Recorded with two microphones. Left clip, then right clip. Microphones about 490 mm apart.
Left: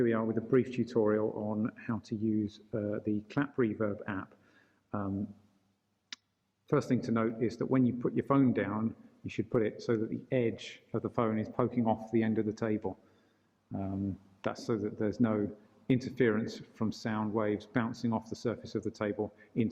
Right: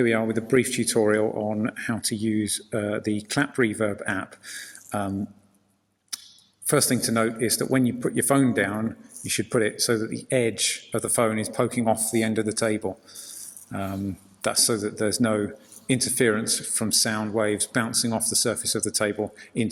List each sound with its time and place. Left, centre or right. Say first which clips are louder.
0.0 s speech: right 8 dB; left
6.7 s speech: right 8 dB; left